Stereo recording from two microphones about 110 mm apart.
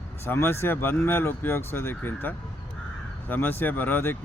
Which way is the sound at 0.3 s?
20° left (ahead or behind).